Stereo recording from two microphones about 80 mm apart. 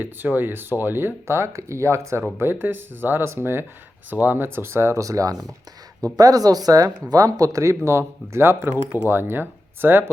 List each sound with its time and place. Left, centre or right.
0.0 s speech: right
2.4 s speech: right